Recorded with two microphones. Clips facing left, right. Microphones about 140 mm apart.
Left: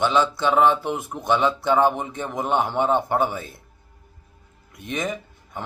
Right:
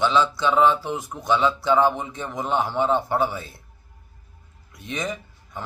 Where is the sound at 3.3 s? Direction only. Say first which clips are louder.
Left 2 dB; 50° left (ahead or behind).